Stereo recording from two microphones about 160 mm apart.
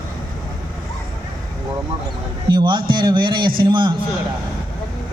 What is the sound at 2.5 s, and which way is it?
Speech, 30° right (ahead or behind).